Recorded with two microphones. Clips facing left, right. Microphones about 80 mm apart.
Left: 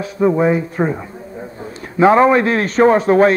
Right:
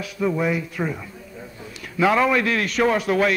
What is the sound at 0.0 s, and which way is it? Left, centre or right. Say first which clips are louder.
A man's voice: left 8 dB; left.